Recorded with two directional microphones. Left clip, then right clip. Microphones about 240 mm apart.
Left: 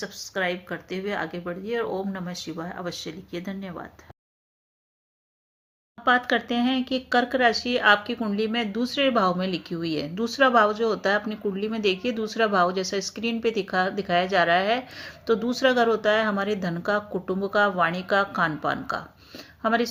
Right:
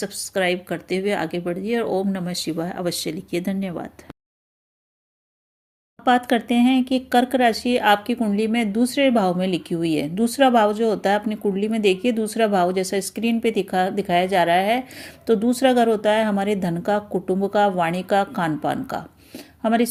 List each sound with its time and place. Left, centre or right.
0.0 s speech: right
6.1 s speech: right